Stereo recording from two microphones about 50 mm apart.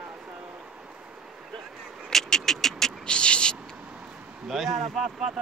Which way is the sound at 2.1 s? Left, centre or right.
Centre.